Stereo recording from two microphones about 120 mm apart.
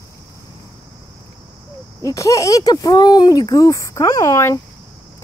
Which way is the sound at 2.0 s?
25° left (ahead or behind).